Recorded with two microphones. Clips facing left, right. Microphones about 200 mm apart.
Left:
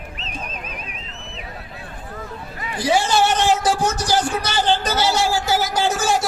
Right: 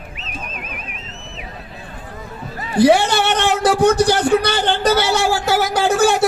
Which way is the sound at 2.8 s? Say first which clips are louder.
Right 5 dB; 60° right (ahead or behind).